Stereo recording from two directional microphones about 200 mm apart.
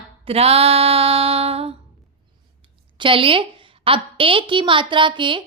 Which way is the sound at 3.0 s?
25° right (ahead or behind).